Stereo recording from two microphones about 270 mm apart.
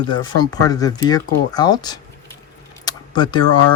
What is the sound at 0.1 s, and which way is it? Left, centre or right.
Speech, centre.